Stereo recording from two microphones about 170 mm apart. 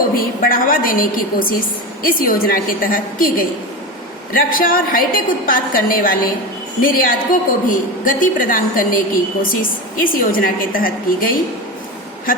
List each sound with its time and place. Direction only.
0.1 s a woman's voice: 55° left (ahead or behind)